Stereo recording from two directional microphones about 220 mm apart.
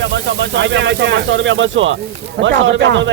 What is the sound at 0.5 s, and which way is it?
Speech, 55° right (ahead or behind).